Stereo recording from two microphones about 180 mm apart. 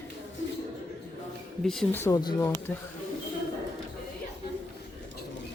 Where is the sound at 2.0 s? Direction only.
20° left (ahead or behind).